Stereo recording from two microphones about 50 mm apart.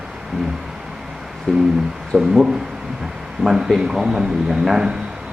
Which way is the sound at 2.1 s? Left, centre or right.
Centre.